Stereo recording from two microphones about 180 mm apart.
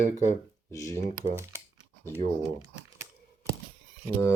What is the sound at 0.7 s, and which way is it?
Speech, 15° left (ahead or behind).